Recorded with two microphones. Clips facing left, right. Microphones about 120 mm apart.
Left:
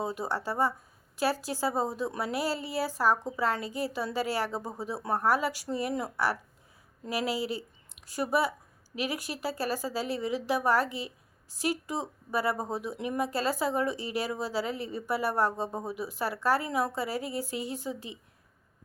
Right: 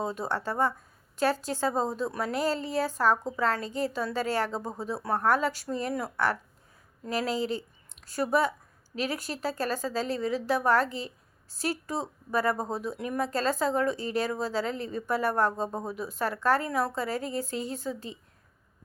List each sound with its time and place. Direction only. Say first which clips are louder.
0.0 s speech: right 1 dB; 10° left (ahead or behind)